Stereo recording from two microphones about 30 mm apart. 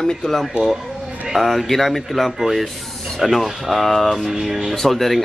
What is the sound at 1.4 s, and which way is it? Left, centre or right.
Speech, centre.